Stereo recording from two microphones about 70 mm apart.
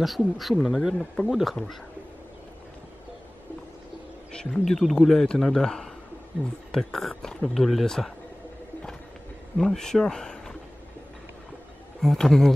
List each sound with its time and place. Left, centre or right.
0.0 s speech: centre
0.9 s speech: centre
1.3 s speech: centre
4.3 s speech: centre
9.6 s speech: centre
12.0 s speech: centre